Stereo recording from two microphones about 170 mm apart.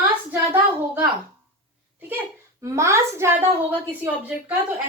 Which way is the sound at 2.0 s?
10° right (ahead or behind).